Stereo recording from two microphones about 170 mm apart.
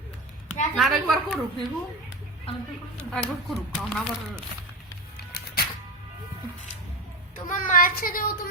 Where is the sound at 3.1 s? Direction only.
Centre (ahead or behind).